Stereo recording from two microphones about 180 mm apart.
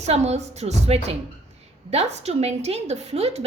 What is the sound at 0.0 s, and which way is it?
A woman's voice, 35° right (ahead or behind).